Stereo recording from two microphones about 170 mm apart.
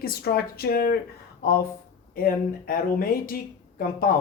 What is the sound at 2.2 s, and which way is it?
Speech, 60° left (ahead or behind).